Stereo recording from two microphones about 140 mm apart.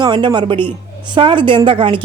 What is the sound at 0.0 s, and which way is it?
Speech, 35° right (ahead or behind).